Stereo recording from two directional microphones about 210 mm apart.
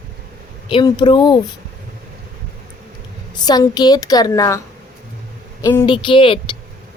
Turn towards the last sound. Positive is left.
turn(degrees=25)  # may be behind; listen again after turning